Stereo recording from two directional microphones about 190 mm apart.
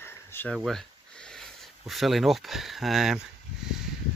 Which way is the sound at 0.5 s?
Centre (ahead or behind).